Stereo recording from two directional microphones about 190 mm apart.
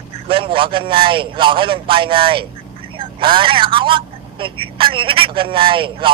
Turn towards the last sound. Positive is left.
turn(degrees=-25)  # may be behind; listen again after turning